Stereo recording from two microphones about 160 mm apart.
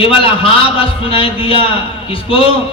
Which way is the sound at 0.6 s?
35° left (ahead or behind).